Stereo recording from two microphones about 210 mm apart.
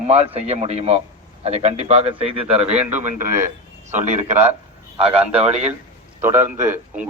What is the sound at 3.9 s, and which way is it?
Speech, 30° right (ahead or behind).